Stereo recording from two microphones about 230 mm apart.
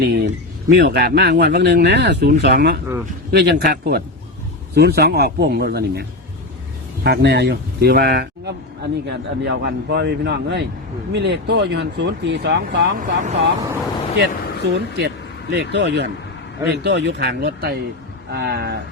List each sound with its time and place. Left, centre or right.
0.0 s speech: right
14.2 s speech: right